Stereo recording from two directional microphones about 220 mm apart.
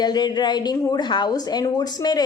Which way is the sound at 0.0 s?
20° left (ahead or behind).